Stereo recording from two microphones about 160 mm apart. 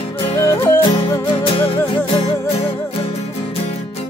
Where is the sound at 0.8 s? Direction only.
35° left (ahead or behind).